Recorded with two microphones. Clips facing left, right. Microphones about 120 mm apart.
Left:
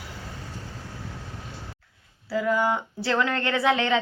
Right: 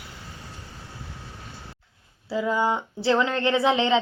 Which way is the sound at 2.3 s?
20° right (ahead or behind).